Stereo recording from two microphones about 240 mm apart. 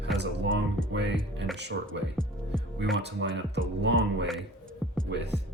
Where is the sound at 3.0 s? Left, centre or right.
Right.